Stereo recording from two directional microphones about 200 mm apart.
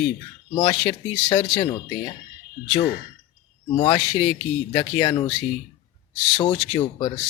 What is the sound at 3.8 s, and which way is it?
Speech, 25° left (ahead or behind).